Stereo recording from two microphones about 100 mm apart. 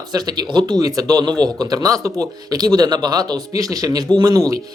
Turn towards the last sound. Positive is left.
turn(degrees=-35)  # may be behind; listen again after turning